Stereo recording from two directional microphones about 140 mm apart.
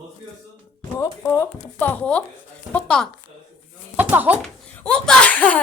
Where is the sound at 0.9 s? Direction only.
20° left (ahead or behind).